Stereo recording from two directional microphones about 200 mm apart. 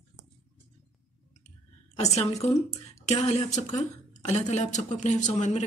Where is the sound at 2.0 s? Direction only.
30° left (ahead or behind).